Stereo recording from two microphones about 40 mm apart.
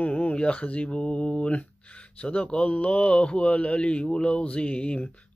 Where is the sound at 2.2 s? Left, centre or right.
Left.